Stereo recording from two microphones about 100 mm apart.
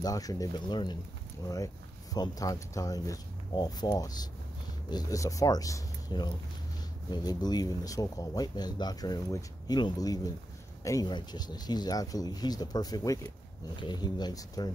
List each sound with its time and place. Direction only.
0.0 s speech: 40° left (ahead or behind)
2.1 s a man's voice: 40° left (ahead or behind)
11.1 s speech: 45° left (ahead or behind)